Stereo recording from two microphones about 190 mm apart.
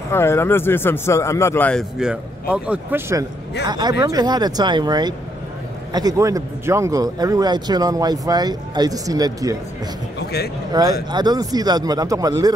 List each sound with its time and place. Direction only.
0.1 s a man's voice: 15° left (ahead or behind); by 9.6 s 20° right (ahead or behind)
10.7 s speech: 20° right (ahead or behind)